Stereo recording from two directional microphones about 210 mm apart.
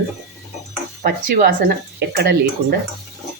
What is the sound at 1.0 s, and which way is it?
Speech, 45° right (ahead or behind).